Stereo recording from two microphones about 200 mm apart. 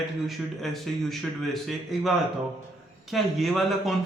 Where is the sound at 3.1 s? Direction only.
Centre (ahead or behind).